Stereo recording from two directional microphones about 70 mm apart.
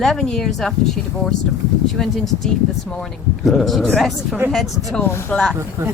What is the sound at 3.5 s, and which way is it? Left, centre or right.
Speech, centre.